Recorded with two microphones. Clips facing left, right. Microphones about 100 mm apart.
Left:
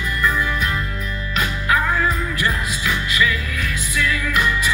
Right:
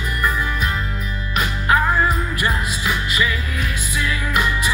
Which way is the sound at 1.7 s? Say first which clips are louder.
Right 3 dB; 30° right (ahead or behind).